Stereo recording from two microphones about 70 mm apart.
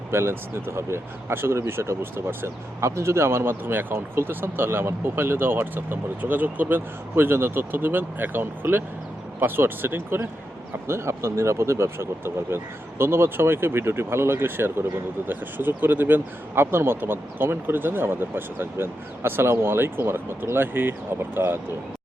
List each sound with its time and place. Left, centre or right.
0.1 s speech: right